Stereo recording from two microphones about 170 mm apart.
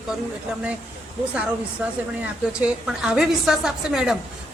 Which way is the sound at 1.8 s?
10° right (ahead or behind).